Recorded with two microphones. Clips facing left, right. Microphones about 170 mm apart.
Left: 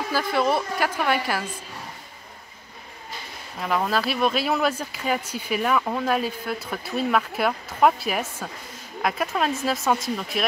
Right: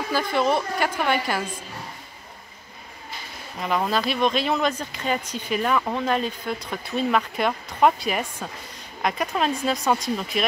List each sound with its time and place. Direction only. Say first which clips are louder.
0.1 s speech: right 1 dB; 5° left (ahead or behind)
3.5 s speech: even; centre (ahead or behind)